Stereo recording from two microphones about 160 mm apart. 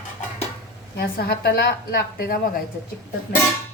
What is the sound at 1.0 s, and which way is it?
A woman's voice, 75° left (ahead or behind).